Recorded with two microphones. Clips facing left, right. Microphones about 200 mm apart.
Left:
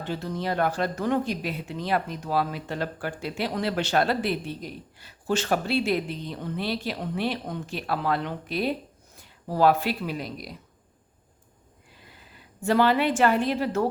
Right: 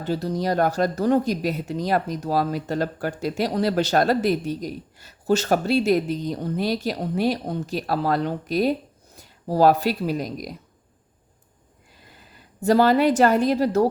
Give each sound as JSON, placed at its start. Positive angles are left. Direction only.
{"t": 0.0, "sound": "speech", "side_deg": -40}
{"t": 12.6, "sound": "speech", "side_deg": -40}